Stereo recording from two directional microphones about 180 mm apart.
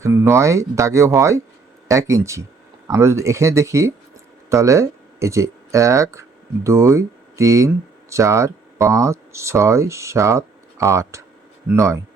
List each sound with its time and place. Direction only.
0.0 s speech: 15° right (ahead or behind)